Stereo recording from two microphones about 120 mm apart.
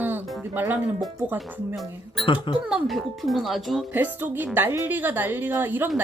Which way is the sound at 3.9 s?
15° right (ahead or behind).